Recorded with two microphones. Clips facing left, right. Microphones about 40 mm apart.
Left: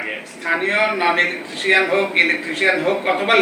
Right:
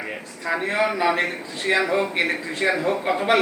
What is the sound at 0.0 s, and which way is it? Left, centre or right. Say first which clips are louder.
A man's voice: left 4 dB; left.